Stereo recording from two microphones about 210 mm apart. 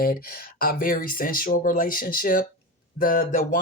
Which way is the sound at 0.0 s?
45° left (ahead or behind).